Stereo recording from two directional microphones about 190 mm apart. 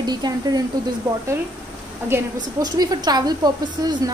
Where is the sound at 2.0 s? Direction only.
15° right (ahead or behind).